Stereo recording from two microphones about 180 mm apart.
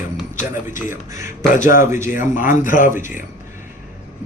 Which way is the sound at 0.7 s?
15° right (ahead or behind).